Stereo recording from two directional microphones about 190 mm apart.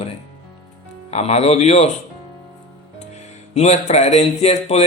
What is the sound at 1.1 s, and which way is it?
Speech, 35° left (ahead or behind).